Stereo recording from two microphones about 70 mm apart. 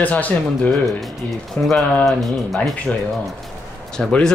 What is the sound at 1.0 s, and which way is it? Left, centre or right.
Speech, centre.